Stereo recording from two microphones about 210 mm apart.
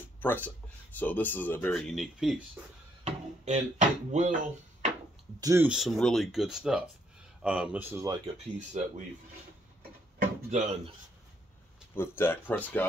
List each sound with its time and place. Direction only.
0.2 s speech: 10° left (ahead or behind)
3.0 s speech: 30° right (ahead or behind)
5.4 s speech: 15° right (ahead or behind)
5.7 s speech: centre (ahead or behind)
8.5 s speech: 35° right (ahead or behind)
10.1 s drawer open or close: 35° right (ahead or behind)
11.9 s speech: 10° left (ahead or behind)